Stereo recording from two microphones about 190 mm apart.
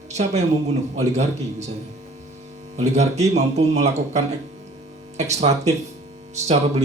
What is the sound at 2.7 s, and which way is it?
Speech, 35° right (ahead or behind).